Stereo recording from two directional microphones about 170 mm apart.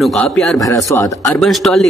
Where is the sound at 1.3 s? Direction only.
Centre (ahead or behind).